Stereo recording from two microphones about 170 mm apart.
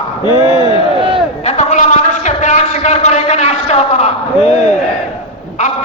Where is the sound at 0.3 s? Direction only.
30° left (ahead or behind).